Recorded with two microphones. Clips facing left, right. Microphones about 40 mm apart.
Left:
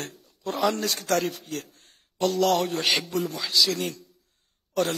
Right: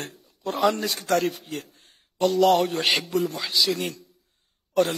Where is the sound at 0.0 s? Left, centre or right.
Centre.